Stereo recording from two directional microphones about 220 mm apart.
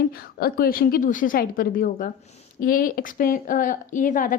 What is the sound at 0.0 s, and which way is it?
A woman's voice, 45° left (ahead or behind).